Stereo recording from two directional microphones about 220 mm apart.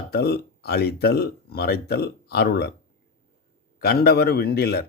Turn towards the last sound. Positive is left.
turn(degrees=45)  # may be behind; listen again after turning